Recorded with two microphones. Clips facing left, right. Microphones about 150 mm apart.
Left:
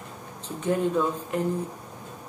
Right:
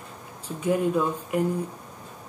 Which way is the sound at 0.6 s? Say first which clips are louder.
Right 1 dB; 5° right (ahead or behind).